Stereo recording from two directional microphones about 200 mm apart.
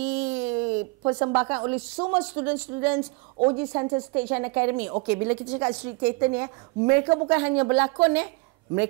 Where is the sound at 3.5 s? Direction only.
25° right (ahead or behind).